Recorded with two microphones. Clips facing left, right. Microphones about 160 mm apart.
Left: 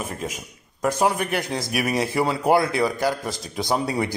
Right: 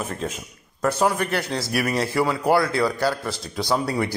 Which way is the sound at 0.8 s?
15° left (ahead or behind).